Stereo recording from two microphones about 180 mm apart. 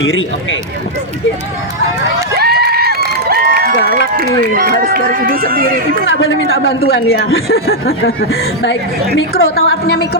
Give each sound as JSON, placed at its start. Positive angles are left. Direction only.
{"t": 0.0, "sound": "speech", "side_deg": 90}
{"t": 2.3, "sound": "a sound", "side_deg": -60}
{"t": 3.8, "sound": "speech", "side_deg": 70}
{"t": 4.2, "sound": "speech", "side_deg": -60}
{"t": 6.1, "sound": "speech", "side_deg": 90}
{"t": 6.8, "sound": "speech", "side_deg": 75}
{"t": 9.1, "sound": "a woman's voice", "side_deg": 75}